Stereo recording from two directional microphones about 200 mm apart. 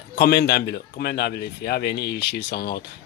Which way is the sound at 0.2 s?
55° left (ahead or behind).